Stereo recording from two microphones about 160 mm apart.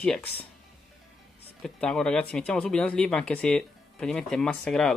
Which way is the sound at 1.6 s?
5° left (ahead or behind).